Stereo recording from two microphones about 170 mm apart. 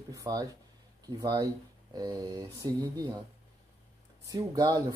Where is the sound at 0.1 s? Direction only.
20° right (ahead or behind).